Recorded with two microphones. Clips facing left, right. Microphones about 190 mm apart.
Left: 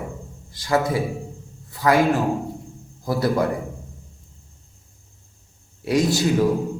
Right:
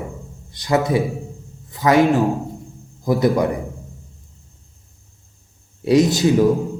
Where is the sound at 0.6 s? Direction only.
20° right (ahead or behind).